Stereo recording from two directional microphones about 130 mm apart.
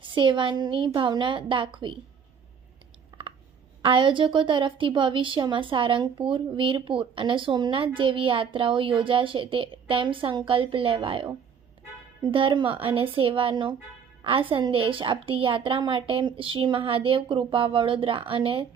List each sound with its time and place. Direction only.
0.0 s a woman's voice: 40° right (ahead or behind)
3.1 s a sound: 35° right (ahead or behind)
3.8 s a woman's voice: 40° right (ahead or behind)